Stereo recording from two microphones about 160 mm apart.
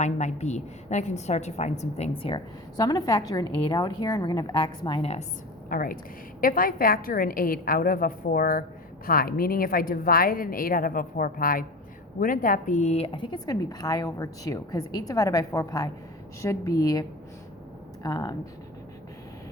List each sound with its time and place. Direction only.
0.0 s a woman's voice: 45° left (ahead or behind)
5.6 s a woman's voice: 60° left (ahead or behind); by 18.3 s 25° left (ahead or behind)